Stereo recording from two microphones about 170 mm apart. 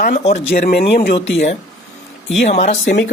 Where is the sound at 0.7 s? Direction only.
65° left (ahead or behind).